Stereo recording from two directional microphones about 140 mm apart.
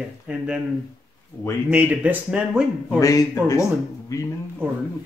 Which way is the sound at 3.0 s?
25° left (ahead or behind).